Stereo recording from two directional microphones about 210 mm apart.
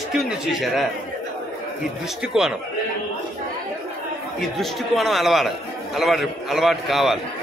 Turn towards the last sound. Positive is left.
turn(degrees=0)  # may be behind; listen again after turning